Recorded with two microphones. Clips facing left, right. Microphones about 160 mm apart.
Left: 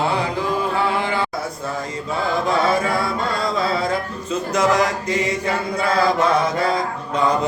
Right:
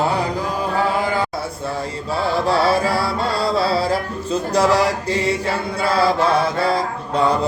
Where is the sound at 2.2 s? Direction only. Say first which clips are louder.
Right 2 dB; 35° right (ahead or behind).